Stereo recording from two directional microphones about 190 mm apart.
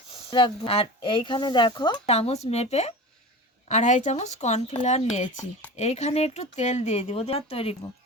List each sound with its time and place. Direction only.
0.1 s speech: 25° left (ahead or behind)